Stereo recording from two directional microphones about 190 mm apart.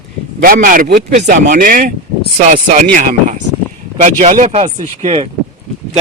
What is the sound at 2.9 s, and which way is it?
Speech, 40° right (ahead or behind).